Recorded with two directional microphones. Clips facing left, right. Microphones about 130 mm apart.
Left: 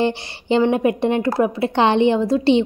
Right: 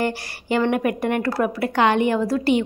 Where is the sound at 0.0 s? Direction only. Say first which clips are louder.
Left 4 dB; 20° left (ahead or behind).